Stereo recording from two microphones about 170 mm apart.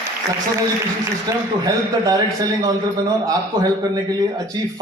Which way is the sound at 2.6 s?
20° right (ahead or behind).